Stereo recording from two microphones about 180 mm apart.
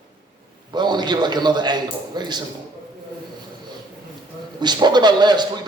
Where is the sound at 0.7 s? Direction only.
25° right (ahead or behind).